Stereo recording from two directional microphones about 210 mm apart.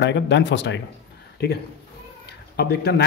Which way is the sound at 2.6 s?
50° left (ahead or behind).